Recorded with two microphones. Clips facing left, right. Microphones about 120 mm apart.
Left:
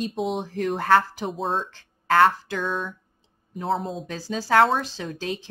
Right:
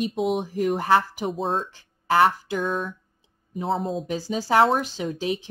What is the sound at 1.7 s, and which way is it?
Speech, 15° right (ahead or behind).